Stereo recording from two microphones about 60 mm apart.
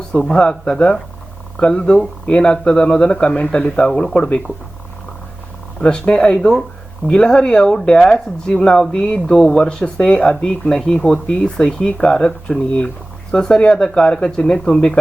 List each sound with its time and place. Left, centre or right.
0.1 s speech: centre
5.8 s speech: centre